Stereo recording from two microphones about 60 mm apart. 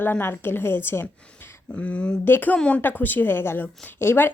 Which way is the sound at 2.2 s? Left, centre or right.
Left.